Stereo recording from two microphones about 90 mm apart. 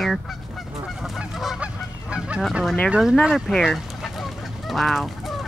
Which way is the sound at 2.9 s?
10° right (ahead or behind).